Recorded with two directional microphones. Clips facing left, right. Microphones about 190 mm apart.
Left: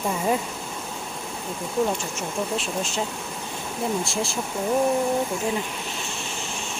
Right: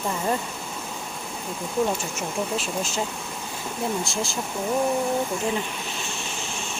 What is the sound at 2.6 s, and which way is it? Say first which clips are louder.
Speech: even; centre (ahead or behind).